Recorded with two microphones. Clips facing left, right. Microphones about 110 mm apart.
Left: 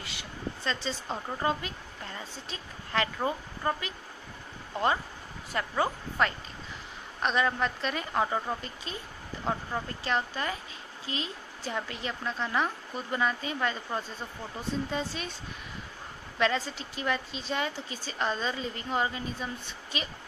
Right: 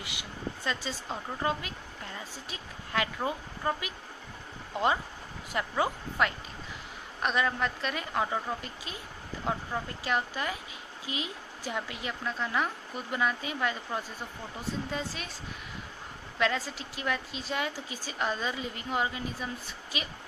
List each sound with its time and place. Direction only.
0.0 s a sound: 15° right (ahead or behind)
1.0 s a woman's voice: centre (ahead or behind)
10.0 s a woman's voice: 10° right (ahead or behind)
16.3 s a woman's voice: 5° right (ahead or behind)